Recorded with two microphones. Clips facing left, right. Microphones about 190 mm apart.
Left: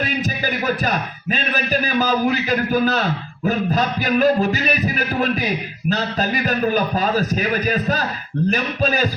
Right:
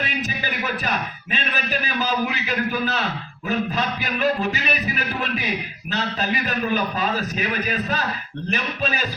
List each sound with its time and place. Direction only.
0.4 s a man's voice: 40° left (ahead or behind)